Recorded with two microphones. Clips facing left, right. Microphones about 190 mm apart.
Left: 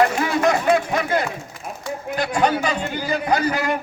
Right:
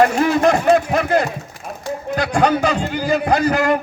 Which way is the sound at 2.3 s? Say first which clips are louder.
Right 4 dB; 45° right (ahead or behind).